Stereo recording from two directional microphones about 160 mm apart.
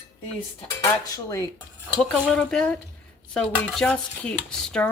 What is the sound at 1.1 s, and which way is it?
Speech, 20° left (ahead or behind).